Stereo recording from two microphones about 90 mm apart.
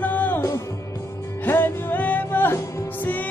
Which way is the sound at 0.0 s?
20° left (ahead or behind).